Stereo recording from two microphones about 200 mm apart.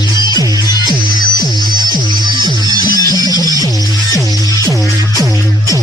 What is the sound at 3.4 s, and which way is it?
Music, 20° right (ahead or behind).